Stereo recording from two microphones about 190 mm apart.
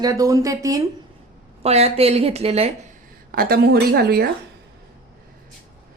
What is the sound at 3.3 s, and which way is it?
Speech, 55° right (ahead or behind).